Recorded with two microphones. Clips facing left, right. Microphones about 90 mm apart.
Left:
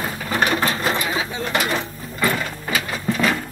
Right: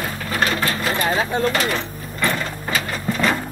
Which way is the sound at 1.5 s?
10° left (ahead or behind).